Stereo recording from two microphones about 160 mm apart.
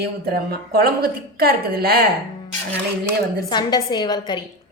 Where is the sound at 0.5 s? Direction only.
75° right (ahead or behind).